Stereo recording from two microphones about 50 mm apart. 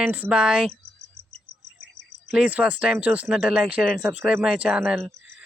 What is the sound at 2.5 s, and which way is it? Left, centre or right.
Speech, right.